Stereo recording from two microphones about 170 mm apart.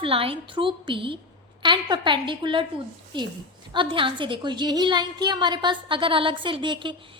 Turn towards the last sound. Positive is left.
turn(degrees=-30)  # may be behind; listen again after turning